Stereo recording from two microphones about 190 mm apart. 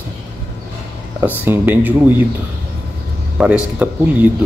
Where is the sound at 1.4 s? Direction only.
10° right (ahead or behind).